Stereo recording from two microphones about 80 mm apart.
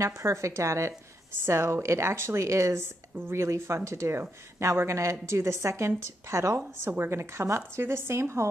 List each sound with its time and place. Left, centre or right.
0.0 s a woman's voice: right
6.5 s a woman's voice: right